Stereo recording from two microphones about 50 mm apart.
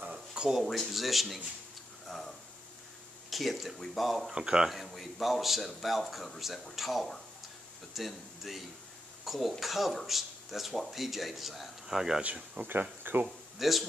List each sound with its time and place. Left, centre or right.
0.1 s speech: centre
2.0 s a sound: centre
3.3 s speech: centre
4.4 s speech: centre
4.6 s speech: centre
12.6 s speech: right
13.6 s speech: centre